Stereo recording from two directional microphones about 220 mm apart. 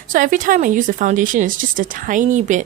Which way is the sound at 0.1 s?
35° right (ahead or behind).